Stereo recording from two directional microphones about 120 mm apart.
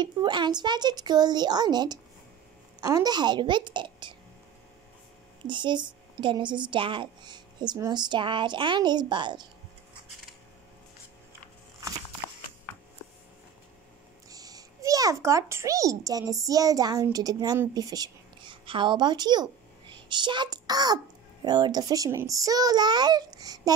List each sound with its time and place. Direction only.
0.0 s speech: 40° right (ahead or behind)
5.5 s speech: 40° right (ahead or behind)
14.3 s a child's voice: 30° right (ahead or behind)